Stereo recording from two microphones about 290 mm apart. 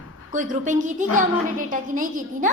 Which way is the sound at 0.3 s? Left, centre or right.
Right.